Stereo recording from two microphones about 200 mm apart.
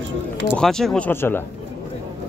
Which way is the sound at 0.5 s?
Centre (ahead or behind).